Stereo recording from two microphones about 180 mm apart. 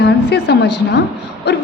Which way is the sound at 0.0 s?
65° left (ahead or behind).